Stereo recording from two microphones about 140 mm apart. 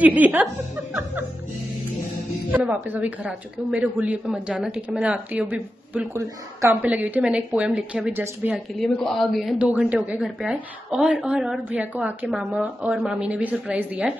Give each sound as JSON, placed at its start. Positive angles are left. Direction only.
{"t": 0.0, "sound": "a woman's voice", "side_deg": -10}
{"t": 2.5, "sound": "a woman's voice", "side_deg": -10}
{"t": 6.1, "sound": "a woman's voice", "side_deg": -20}
{"t": 6.8, "sound": "a woman's voice", "side_deg": -10}
{"t": 8.7, "sound": "a woman's voice", "side_deg": 5}